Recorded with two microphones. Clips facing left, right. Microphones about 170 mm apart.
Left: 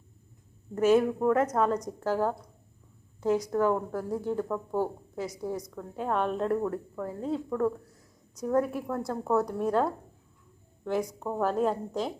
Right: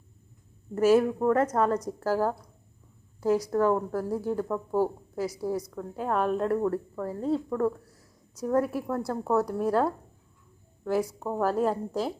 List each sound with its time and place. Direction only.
0.8 s a woman's voice: 5° right (ahead or behind)